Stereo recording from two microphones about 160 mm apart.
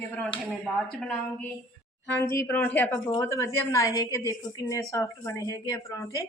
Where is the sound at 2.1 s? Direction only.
15° left (ahead or behind).